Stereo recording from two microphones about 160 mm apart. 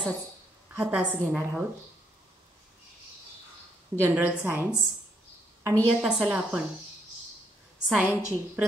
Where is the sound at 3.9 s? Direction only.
15° right (ahead or behind).